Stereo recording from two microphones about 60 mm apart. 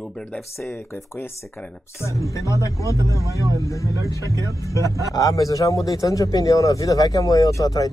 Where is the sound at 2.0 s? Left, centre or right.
Left.